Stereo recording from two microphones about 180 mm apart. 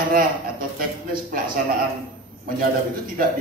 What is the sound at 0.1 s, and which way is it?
A man's voice, 50° right (ahead or behind).